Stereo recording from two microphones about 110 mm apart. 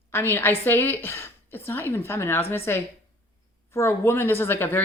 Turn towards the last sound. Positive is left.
turn(degrees=20)  # may be behind; listen again after turning